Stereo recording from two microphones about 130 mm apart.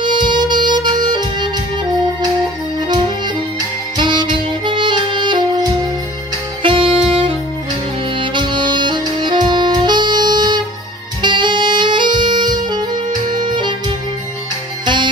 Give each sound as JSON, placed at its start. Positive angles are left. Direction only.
{"t": 0.0, "sound": "music", "side_deg": -35}
{"t": 3.9, "sound": "music", "side_deg": -35}
{"t": 6.6, "sound": "saxophone", "side_deg": -40}
{"t": 13.3, "sound": "music", "side_deg": -35}